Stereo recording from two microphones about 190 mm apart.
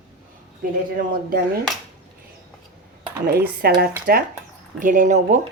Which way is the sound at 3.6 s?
55° right (ahead or behind).